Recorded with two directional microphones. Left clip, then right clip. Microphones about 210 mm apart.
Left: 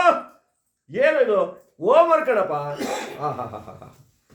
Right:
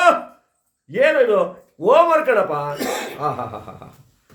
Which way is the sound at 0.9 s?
15° right (ahead or behind).